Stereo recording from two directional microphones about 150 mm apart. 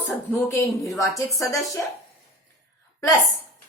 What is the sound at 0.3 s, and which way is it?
A woman's voice, 15° left (ahead or behind).